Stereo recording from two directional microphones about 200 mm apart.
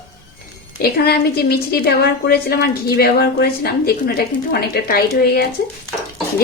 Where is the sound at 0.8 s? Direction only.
50° left (ahead or behind).